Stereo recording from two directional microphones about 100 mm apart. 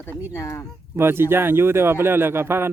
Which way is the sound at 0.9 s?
25° right (ahead or behind).